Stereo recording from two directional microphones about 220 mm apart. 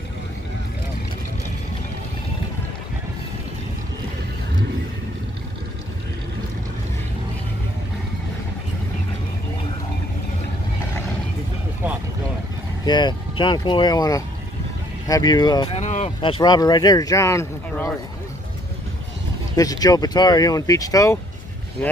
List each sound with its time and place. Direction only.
12.8 s speech: 20° left (ahead or behind)
15.8 s speech: 30° left (ahead or behind); by 17.9 s 15° left (ahead or behind)
19.5 s speech: 15° left (ahead or behind)